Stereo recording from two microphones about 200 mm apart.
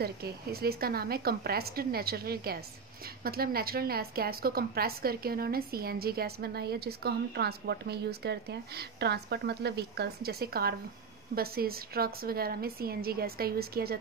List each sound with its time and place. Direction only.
0.0 s a woman's voice: 50° right (ahead or behind)